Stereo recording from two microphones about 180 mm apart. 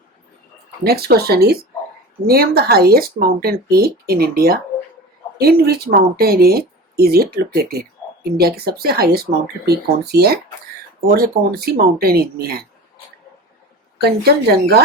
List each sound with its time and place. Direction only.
0.9 s speech: 60° right (ahead or behind)
14.0 s speech: 60° right (ahead or behind)